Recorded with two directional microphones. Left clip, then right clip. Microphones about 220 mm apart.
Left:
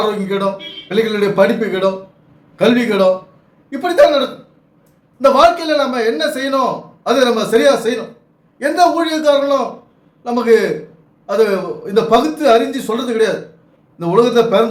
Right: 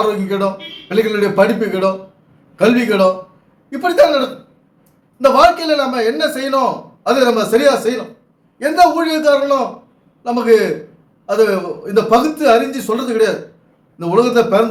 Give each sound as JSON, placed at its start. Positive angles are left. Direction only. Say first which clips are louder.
{"t": 0.0, "sound": "a man's voice", "louder": "right 1 dB", "side_deg": -5}